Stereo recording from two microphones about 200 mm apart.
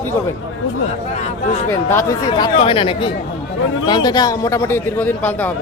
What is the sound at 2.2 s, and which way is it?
A man's voice, 25° left (ahead or behind).